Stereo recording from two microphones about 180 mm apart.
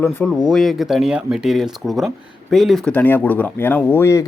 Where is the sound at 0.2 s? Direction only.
5° left (ahead or behind).